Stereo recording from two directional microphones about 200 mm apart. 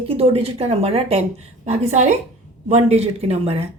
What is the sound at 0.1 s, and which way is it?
A woman's voice, 30° right (ahead or behind).